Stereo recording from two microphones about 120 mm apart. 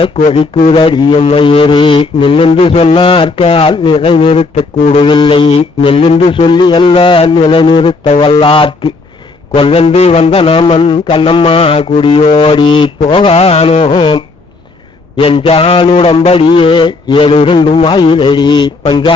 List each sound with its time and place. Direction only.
0.7 s mantra: 45° left (ahead or behind)
18.9 s speech: 40° left (ahead or behind)